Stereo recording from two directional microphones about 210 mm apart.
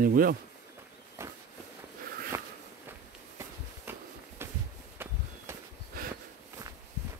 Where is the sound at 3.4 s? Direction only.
10° right (ahead or behind).